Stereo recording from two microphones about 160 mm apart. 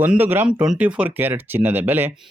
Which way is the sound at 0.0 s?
10° right (ahead or behind).